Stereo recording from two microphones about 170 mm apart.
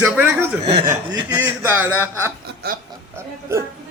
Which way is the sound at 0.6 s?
40° right (ahead or behind).